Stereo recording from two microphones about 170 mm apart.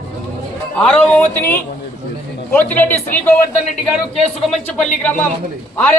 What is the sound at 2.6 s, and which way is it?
Speech, 10° left (ahead or behind).